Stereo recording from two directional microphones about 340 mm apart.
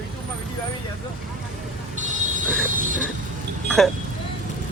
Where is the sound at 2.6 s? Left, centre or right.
Right.